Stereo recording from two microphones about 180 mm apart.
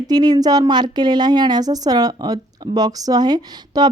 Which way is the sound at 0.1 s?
20° right (ahead or behind).